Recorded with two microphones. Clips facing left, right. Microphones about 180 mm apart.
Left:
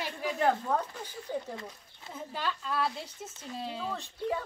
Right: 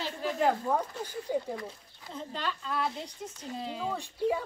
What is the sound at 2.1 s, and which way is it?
Speech, 5° left (ahead or behind).